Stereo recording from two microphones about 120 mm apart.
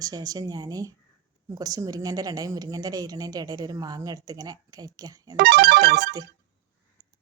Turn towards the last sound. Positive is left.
turn(degrees=-30)  # may be behind; listen again after turning